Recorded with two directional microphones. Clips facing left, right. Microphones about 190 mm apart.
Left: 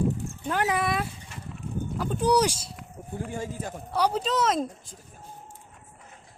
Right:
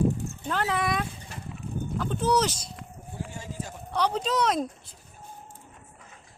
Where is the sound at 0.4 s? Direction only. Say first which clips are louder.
Left 2 dB; 10° left (ahead or behind).